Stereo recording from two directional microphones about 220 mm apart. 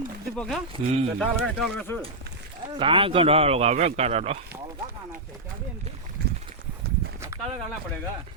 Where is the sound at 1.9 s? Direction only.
10° left (ahead or behind).